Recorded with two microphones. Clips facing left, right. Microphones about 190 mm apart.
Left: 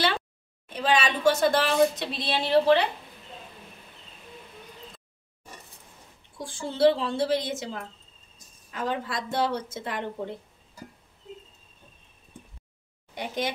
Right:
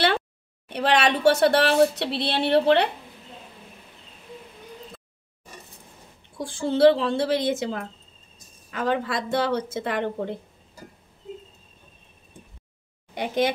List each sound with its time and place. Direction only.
0.7 s a woman's voice: 70° right (ahead or behind)
6.3 s a woman's voice: 70° right (ahead or behind)
13.1 s speech: 70° right (ahead or behind)